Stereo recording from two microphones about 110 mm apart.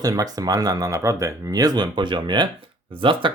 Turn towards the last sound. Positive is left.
turn(degrees=-50)  # may be behind; listen again after turning